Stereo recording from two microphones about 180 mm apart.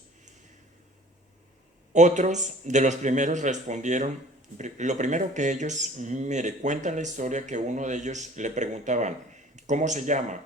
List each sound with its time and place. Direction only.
1.9 s speech: 40° right (ahead or behind)